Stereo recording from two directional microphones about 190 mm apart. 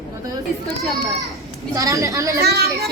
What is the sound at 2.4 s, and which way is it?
Speech, 55° right (ahead or behind).